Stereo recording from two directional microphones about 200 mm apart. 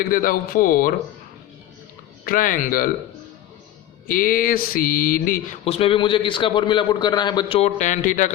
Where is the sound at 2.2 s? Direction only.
45° left (ahead or behind).